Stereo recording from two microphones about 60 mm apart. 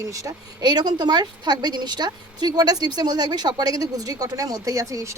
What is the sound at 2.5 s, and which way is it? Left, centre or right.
Speech, right.